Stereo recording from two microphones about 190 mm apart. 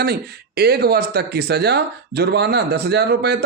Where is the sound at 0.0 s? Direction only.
55° right (ahead or behind).